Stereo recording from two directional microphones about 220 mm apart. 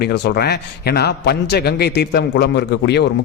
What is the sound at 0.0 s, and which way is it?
A man's voice, 45° left (ahead or behind).